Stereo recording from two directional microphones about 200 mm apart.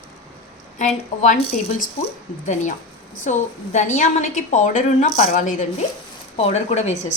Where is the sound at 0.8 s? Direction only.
40° left (ahead or behind).